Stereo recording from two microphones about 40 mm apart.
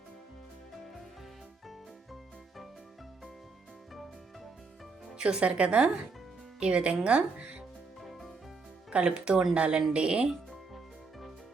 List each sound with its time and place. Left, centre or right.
5.1 s speech: right
8.9 s speech: right